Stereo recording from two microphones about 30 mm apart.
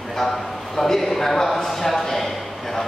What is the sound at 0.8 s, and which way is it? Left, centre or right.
A man's voice, centre.